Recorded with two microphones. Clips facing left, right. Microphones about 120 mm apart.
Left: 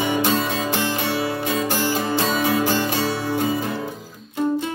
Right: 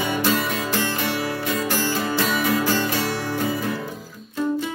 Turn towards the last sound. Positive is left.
turn(degrees=20)  # may be behind; listen again after turning